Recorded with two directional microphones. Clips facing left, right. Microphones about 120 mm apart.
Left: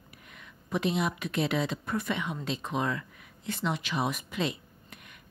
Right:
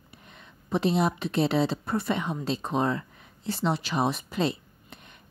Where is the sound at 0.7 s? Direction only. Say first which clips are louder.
Right 4 dB; 35° right (ahead or behind).